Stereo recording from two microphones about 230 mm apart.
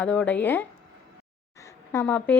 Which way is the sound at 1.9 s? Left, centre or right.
Centre.